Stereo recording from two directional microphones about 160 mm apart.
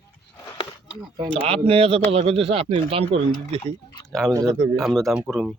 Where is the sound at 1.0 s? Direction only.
25° right (ahead or behind).